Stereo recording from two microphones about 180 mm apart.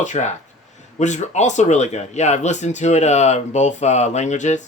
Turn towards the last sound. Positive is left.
turn(degrees=40)  # may be behind; listen again after turning